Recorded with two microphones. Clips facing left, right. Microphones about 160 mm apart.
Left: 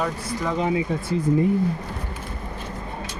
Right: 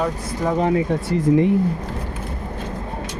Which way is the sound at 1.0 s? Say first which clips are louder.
Right 4 dB; 90° right.